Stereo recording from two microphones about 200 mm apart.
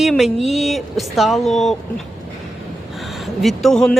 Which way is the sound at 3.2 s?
Centre (ahead or behind).